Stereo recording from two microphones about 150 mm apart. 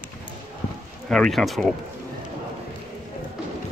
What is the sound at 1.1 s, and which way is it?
Speech, 5° left (ahead or behind).